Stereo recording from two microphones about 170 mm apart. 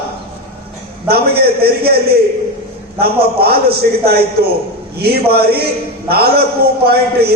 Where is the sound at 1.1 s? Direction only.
65° right (ahead or behind).